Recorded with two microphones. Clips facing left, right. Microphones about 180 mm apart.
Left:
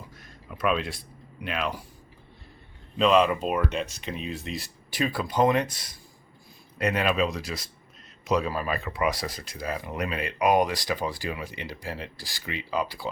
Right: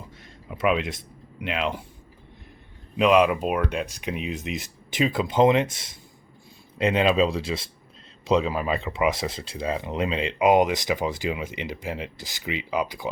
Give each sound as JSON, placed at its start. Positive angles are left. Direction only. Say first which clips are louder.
{"t": 0.2, "sound": "speech", "louder": "right 3 dB", "side_deg": -25}
{"t": 3.0, "sound": "speech", "louder": "right 2 dB", "side_deg": -10}